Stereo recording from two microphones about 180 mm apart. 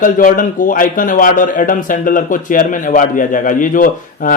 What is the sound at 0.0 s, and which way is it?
A man's voice, 50° left (ahead or behind).